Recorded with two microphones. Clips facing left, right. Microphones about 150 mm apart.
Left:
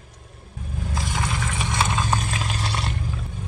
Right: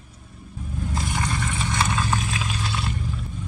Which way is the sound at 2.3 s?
40° left (ahead or behind).